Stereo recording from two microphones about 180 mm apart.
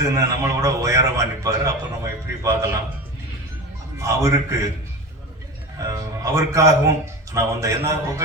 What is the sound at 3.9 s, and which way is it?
Speech, 15° right (ahead or behind).